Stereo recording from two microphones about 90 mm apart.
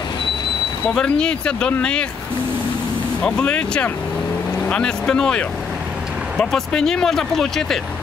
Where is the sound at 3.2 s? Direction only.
15° left (ahead or behind).